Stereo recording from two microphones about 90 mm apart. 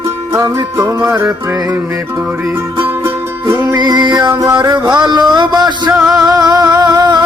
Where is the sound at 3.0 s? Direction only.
30° right (ahead or behind).